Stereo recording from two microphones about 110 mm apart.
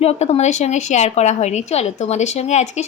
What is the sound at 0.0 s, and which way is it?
A woman's voice, 75° left (ahead or behind).